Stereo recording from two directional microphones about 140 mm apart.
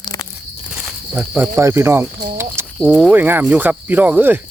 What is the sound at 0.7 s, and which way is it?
Speech, 10° right (ahead or behind).